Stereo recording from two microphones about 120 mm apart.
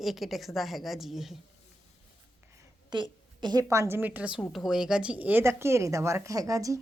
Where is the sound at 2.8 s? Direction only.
40° right (ahead or behind).